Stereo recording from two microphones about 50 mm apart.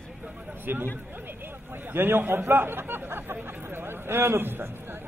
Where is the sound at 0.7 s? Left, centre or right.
Right.